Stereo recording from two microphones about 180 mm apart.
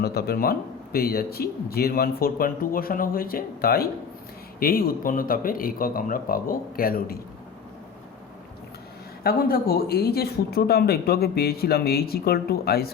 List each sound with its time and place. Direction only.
0.0 s speech: 60° left (ahead or behind)
9.2 s speech: 55° left (ahead or behind)